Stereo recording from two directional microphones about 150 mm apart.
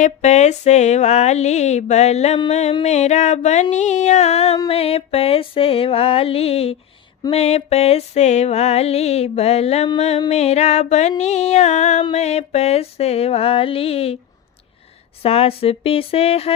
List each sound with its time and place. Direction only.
0.0 s music: 50° left (ahead or behind)
15.2 s music: 40° left (ahead or behind)